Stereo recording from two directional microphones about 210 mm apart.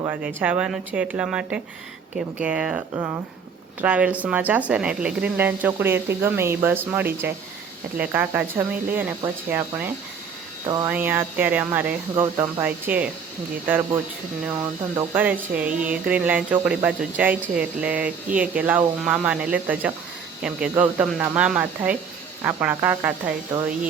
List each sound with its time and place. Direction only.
0.1 s speech: 5° right (ahead or behind)